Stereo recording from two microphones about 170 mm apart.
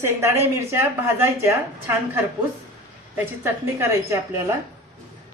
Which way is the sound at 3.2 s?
15° right (ahead or behind).